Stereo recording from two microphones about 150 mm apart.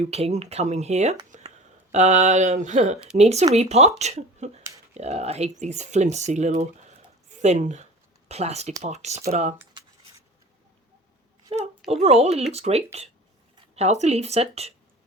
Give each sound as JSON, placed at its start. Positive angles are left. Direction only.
{"t": 0.0, "sound": "speech", "side_deg": -45}
{"t": 11.4, "sound": "a sound", "side_deg": -45}
{"t": 11.9, "sound": "speech", "side_deg": -45}